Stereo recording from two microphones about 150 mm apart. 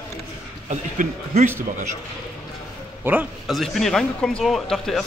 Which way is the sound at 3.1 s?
15° right (ahead or behind).